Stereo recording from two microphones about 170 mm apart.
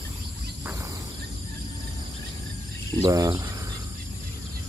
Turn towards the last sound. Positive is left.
turn(degrees=-20)  # may be behind; listen again after turning